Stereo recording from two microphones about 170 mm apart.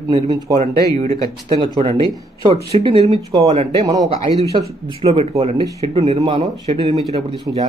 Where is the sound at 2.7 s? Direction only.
35° right (ahead or behind).